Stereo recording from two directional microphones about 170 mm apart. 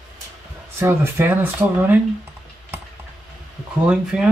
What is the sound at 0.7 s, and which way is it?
Speech, 15° right (ahead or behind).